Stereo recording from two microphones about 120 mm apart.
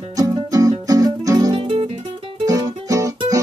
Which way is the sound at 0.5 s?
30° right (ahead or behind).